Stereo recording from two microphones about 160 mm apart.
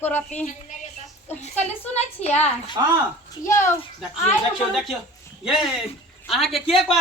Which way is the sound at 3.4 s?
15° left (ahead or behind).